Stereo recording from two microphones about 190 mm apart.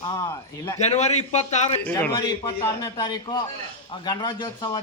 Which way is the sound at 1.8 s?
10° left (ahead or behind).